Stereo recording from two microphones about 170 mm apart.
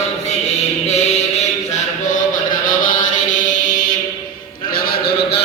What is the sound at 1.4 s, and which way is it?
Chant, 45° left (ahead or behind).